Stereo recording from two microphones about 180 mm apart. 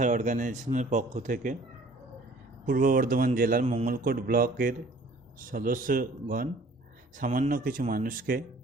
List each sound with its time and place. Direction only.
0.0 s speech: 45° right (ahead or behind)
2.6 s speech: 50° right (ahead or behind)